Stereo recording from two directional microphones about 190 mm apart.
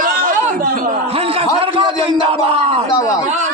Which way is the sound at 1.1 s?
30° right (ahead or behind).